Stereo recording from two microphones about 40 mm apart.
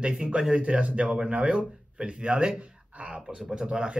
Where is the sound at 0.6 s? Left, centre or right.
Right.